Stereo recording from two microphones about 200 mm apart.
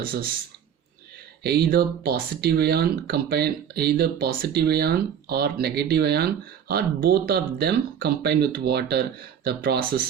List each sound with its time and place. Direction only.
0.0 s speech: 50° right (ahead or behind)
1.5 s speech: 50° right (ahead or behind)